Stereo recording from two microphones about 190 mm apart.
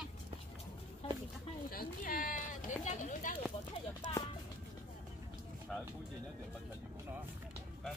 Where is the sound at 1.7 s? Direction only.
50° left (ahead or behind).